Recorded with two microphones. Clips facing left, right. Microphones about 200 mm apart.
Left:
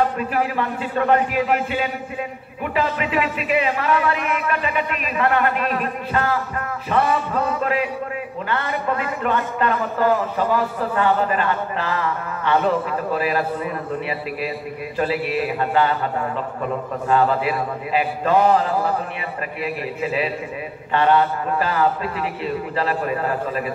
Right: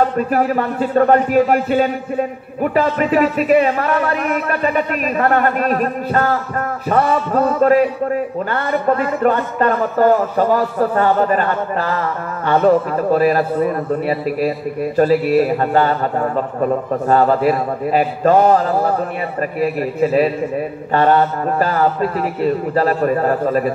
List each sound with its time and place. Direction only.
0.2 s a man's voice: 45° right (ahead or behind)